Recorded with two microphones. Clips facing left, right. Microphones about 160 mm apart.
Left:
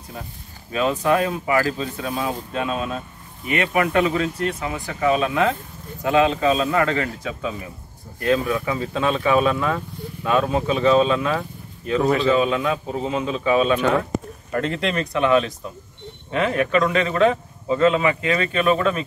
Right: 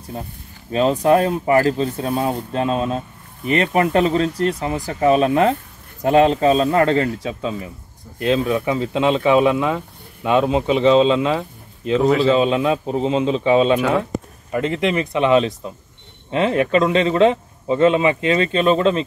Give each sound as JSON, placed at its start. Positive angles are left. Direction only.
{"t": 0.7, "sound": "speech", "side_deg": -35}
{"t": 14.5, "sound": "speech", "side_deg": -10}
{"t": 15.1, "sound": "speech", "side_deg": -25}